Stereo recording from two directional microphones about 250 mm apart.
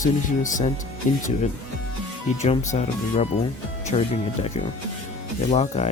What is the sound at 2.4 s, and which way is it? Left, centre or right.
Speech, left.